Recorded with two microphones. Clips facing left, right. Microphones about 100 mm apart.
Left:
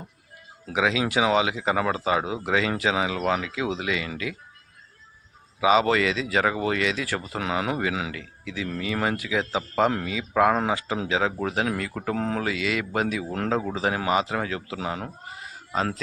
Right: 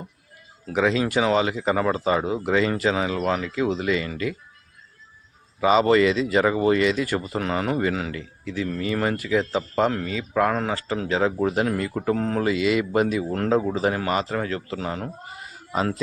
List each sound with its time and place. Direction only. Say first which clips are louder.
0.7 s speech: right 2 dB; 5° left (ahead or behind)
5.5 s speech: right 3 dB; 5° left (ahead or behind)
11.1 s speech: right 4 dB; centre (ahead or behind)
15.7 s speech: right 2 dB; 5° right (ahead or behind)